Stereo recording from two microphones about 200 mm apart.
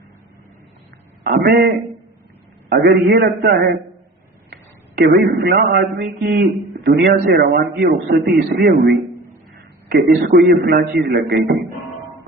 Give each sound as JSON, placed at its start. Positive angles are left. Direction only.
{"t": 1.2, "sound": "a man's voice", "side_deg": -50}
{"t": 4.9, "sound": "a man's voice", "side_deg": -45}